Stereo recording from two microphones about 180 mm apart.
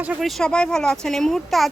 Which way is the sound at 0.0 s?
5° right (ahead or behind).